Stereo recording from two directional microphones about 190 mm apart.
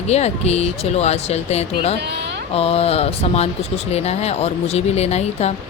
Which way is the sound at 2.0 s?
65° right (ahead or behind).